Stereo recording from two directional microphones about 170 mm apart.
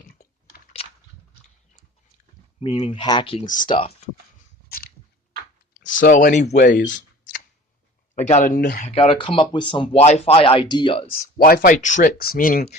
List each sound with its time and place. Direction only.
0.8 s a sound: 35° left (ahead or behind)
2.7 s speech: 30° left (ahead or behind)
6.0 s speech: 55° left (ahead or behind)
8.1 s speech: 45° left (ahead or behind); by 8.8 s 60° left (ahead or behind)
8.8 s speech: 35° left (ahead or behind)
11.3 s speech: 60° left (ahead or behind)